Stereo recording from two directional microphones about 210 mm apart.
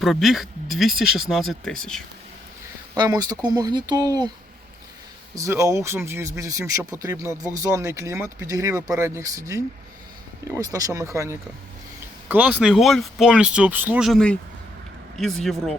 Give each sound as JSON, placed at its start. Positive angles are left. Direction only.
{"t": 0.0, "sound": "speech", "side_deg": 0}
{"t": 2.9, "sound": "speech", "side_deg": -20}
{"t": 5.3, "sound": "speech", "side_deg": -15}